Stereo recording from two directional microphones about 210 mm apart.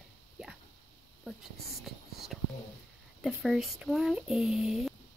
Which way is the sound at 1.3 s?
5° right (ahead or behind).